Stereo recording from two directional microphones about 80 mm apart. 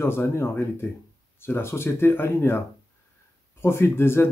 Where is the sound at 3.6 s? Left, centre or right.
Left.